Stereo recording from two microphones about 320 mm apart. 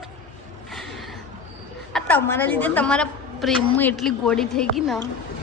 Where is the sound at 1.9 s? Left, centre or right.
Centre.